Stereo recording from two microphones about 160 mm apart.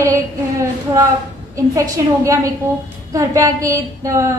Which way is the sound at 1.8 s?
20° right (ahead or behind).